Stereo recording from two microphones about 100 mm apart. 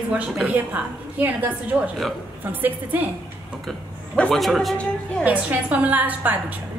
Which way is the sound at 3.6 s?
5° left (ahead or behind).